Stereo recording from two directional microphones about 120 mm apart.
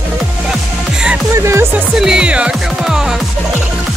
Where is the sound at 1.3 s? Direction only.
25° right (ahead or behind).